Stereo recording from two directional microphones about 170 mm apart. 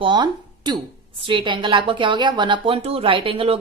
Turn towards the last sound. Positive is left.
turn(degrees=-30)  # may be behind; listen again after turning